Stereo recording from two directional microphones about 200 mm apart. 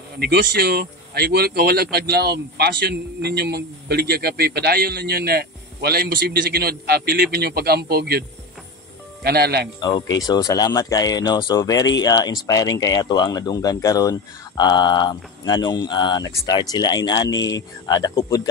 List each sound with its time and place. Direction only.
0.2 s speech: 55° right (ahead or behind)
9.8 s speech: 20° left (ahead or behind)